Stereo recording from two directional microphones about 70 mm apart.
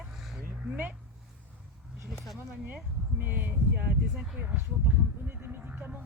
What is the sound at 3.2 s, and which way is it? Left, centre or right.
Speech, right.